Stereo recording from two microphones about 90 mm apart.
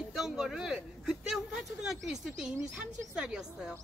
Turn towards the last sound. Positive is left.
turn(degrees=-5)  # may be behind; listen again after turning